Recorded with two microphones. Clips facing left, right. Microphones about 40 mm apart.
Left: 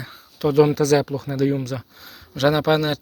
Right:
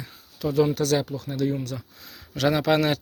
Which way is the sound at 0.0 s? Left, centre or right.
Left.